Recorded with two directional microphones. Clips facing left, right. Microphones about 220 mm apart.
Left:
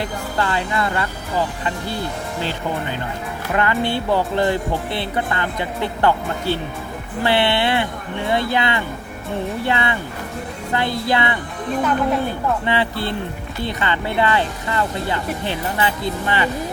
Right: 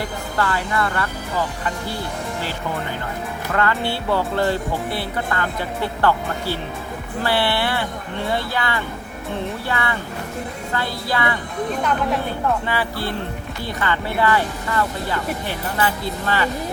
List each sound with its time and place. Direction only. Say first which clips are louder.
0.0 s speech: left 1 dB; 20° left (ahead or behind)
3.5 s speech: left 2 dB; 20° left (ahead or behind)
12.6 s speech: left 3 dB; 20° left (ahead or behind)